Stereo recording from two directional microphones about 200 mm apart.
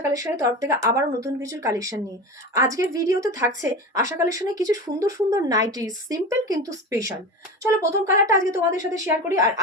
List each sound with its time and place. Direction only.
0.1 s speech: 15° right (ahead or behind)